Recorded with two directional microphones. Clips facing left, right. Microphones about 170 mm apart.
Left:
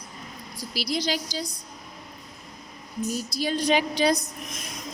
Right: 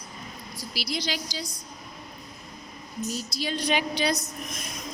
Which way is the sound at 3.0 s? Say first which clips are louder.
Left 3 dB; 55° left (ahead or behind).